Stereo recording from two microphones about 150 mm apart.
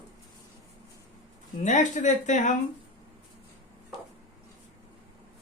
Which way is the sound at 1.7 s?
55° left (ahead or behind).